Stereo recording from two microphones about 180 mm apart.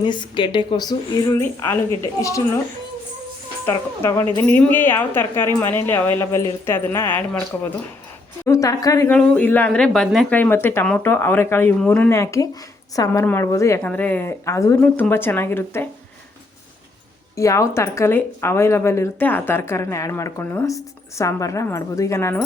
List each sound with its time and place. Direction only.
0.0 s a woman's voice: 25° left (ahead or behind)
3.7 s speech: 15° left (ahead or behind)
9.1 s speech: 5° left (ahead or behind)
17.3 s speech: 15° left (ahead or behind)